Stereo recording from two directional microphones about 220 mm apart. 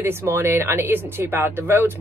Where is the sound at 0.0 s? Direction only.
10° right (ahead or behind).